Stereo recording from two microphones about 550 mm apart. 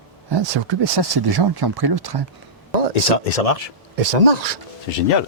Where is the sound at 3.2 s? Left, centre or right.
Left.